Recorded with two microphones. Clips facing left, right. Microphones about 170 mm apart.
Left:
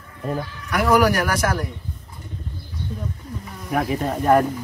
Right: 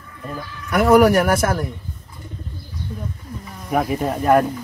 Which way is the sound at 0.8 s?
25° right (ahead or behind).